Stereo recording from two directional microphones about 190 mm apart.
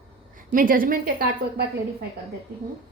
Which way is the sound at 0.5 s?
50° right (ahead or behind).